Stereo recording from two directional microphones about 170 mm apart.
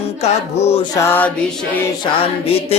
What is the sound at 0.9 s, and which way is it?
Mantra, 15° left (ahead or behind).